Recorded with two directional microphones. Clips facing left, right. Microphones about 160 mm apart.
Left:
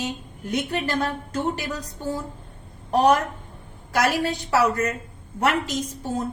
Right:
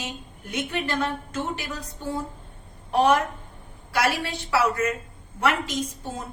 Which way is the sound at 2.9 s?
40° left (ahead or behind).